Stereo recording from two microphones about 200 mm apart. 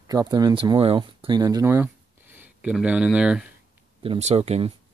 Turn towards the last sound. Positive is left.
turn(degrees=-30)  # may be behind; listen again after turning